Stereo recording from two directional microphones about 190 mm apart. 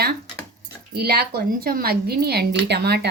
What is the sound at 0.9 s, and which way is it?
Speech, 55° right (ahead or behind).